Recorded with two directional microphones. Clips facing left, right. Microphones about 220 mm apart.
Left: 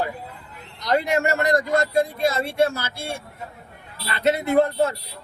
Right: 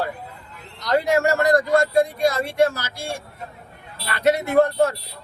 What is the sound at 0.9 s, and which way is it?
A man's voice, 20° left (ahead or behind).